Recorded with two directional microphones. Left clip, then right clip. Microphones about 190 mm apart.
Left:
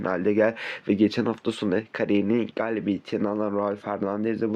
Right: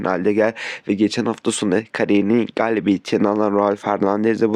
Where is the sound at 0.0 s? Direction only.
30° right (ahead or behind).